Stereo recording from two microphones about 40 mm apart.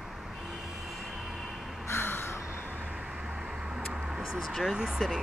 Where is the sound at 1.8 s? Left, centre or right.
Left.